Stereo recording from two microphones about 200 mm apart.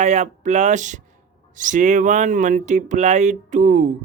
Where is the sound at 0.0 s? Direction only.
35° right (ahead or behind).